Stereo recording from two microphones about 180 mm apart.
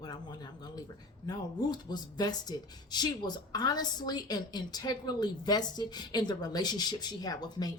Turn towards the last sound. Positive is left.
turn(degrees=20)  # may be behind; listen again after turning